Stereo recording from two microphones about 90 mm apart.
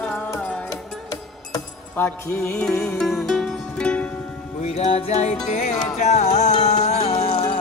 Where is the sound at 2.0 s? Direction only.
25° left (ahead or behind).